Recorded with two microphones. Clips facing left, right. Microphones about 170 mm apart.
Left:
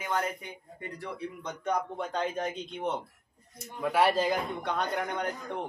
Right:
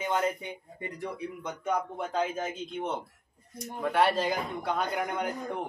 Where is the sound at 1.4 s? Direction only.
5° right (ahead or behind).